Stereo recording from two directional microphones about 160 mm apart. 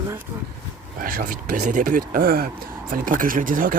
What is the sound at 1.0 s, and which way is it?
Speech, 60° right (ahead or behind).